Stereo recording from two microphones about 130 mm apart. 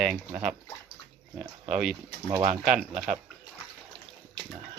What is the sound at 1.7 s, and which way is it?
Speech, 5° right (ahead or behind).